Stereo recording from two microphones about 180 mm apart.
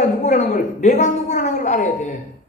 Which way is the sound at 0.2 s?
40° left (ahead or behind).